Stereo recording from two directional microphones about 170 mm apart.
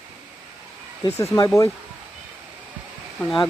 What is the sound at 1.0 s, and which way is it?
Speech, 20° left (ahead or behind).